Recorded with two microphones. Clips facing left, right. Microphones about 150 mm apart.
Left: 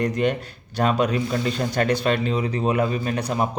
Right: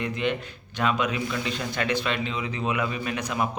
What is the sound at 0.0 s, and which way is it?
Speech, 40° left (ahead or behind).